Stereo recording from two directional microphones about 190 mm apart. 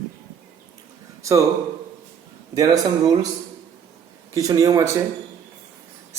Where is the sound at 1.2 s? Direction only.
15° right (ahead or behind).